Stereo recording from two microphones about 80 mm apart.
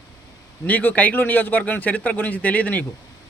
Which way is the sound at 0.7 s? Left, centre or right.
Centre.